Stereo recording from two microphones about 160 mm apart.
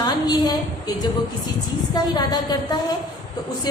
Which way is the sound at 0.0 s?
25° left (ahead or behind).